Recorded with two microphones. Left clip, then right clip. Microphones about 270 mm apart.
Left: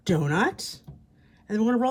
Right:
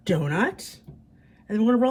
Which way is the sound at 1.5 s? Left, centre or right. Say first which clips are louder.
Right 3 dB; centre.